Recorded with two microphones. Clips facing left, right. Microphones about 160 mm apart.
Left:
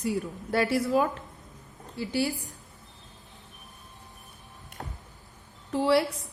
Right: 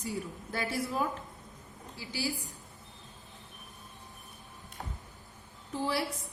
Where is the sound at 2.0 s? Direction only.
60° left (ahead or behind).